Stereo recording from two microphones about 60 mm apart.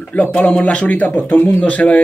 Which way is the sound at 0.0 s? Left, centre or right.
Left.